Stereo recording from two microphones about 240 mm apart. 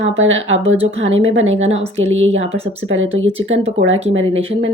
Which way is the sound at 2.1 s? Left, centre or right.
Right.